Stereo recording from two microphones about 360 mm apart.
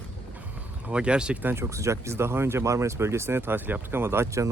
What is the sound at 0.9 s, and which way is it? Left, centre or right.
Speech, centre.